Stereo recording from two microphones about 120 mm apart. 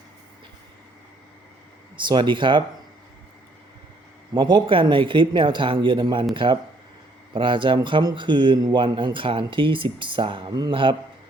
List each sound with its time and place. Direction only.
2.0 s speech: 40° right (ahead or behind)
4.4 s speech: 40° right (ahead or behind)